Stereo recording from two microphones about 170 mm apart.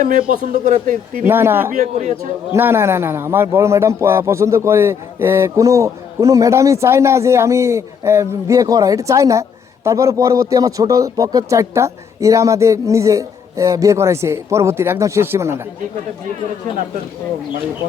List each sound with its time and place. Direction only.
0.0 s speech: 50° right (ahead or behind)
1.2 s a man's voice: 15° right (ahead or behind)
1.7 s speech: 45° right (ahead or behind)
2.5 s a man's voice: 15° right (ahead or behind)